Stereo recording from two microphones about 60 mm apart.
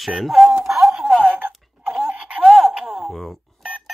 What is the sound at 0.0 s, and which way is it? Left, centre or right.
Speech, centre.